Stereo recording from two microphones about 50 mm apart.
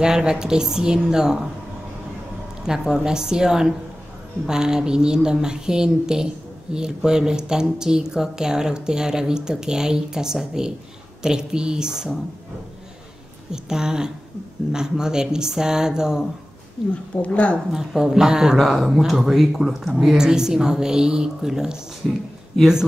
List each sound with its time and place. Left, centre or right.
0.0 s speech: centre
2.6 s speech: centre
13.5 s speech: centre
16.9 s speech: left
17.7 s speech: centre